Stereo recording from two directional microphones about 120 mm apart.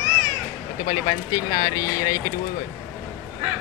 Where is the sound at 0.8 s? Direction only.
35° left (ahead or behind).